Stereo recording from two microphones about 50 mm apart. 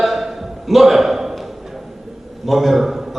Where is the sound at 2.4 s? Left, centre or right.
Centre.